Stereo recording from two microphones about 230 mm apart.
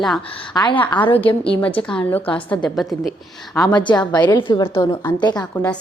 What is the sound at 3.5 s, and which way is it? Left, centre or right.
A woman's voice, centre.